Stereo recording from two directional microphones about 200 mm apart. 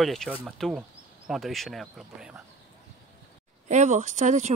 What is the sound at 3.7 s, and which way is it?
Speech, 35° right (ahead or behind).